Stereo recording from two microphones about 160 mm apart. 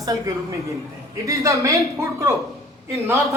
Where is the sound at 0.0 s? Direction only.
20° right (ahead or behind).